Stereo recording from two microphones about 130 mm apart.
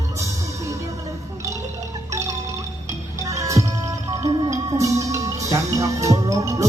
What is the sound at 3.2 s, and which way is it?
Music, 25° right (ahead or behind).